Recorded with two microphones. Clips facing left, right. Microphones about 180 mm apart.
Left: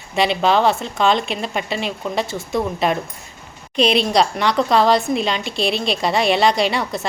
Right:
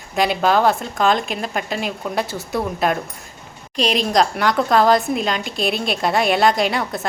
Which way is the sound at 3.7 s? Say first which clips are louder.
Left 4 dB; 40° right (ahead or behind).